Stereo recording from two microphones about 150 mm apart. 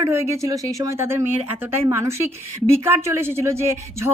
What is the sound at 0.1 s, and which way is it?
A woman's voice, 20° right (ahead or behind).